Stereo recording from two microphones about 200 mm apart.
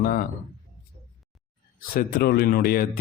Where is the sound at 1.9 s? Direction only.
50° left (ahead or behind).